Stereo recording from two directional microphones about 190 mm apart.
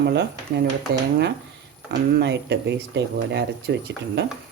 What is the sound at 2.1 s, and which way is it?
Speech, 65° right (ahead or behind).